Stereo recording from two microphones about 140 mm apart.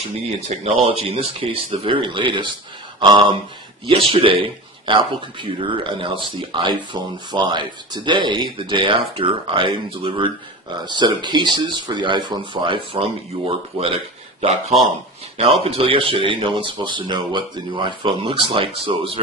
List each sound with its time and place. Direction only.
0.4 s speech: 45° right (ahead or behind)
15.6 s speech: 40° right (ahead or behind)